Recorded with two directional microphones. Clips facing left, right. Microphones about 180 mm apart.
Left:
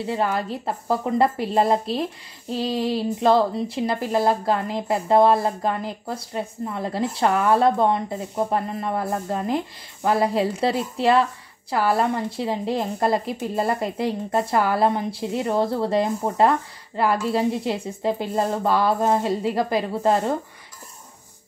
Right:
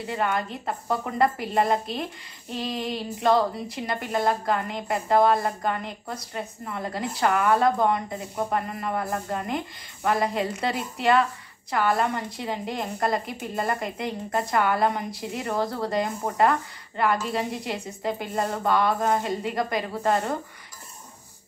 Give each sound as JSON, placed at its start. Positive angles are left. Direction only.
{"t": 0.0, "sound": "a woman's voice", "side_deg": 30}